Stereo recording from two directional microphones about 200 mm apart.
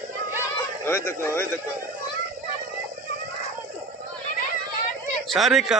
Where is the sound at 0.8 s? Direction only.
10° left (ahead or behind).